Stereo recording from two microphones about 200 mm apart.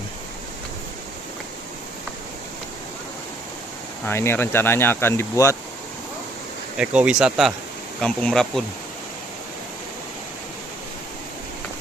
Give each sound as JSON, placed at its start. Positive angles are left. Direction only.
{"t": 4.0, "sound": "speech", "side_deg": 10}
{"t": 6.8, "sound": "speech", "side_deg": -5}